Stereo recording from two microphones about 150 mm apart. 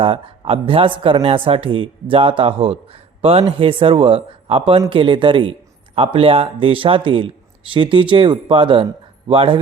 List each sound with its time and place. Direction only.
0.0 s a man's voice: 40° right (ahead or behind)